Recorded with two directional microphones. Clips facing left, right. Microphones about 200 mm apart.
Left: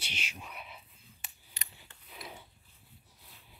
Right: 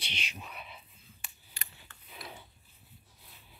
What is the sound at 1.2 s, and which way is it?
Scissors, 20° left (ahead or behind).